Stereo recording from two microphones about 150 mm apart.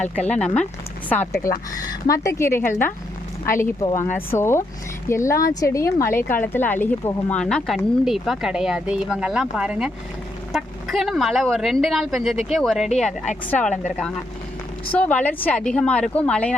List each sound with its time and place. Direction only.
0.3 s speech: 10° left (ahead or behind)
1.5 s a woman's voice: 20° left (ahead or behind)
14.9 s speech: 10° left (ahead or behind)